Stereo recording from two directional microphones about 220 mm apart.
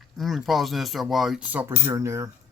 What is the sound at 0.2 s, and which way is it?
Speech, centre (ahead or behind).